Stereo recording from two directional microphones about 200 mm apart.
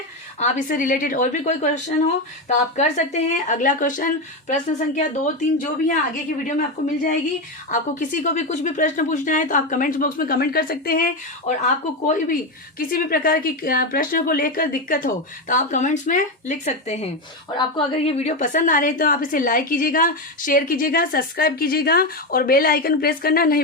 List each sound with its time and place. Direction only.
0.3 s a woman's voice: 35° left (ahead or behind)